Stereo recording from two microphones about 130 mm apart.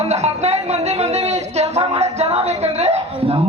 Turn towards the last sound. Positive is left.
turn(degrees=-50)  # may be behind; listen again after turning